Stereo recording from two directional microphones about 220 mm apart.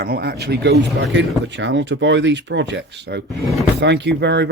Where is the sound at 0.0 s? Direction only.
45° right (ahead or behind).